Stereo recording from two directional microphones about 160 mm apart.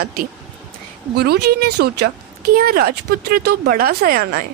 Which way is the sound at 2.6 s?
70° right (ahead or behind).